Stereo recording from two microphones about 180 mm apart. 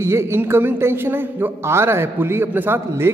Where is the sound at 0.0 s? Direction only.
15° right (ahead or behind).